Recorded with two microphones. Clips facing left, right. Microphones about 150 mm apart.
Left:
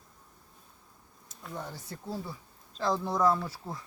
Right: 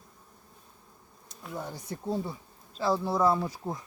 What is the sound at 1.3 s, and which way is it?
Speech, 5° right (ahead or behind).